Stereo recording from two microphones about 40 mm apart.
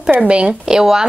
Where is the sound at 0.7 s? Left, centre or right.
Centre.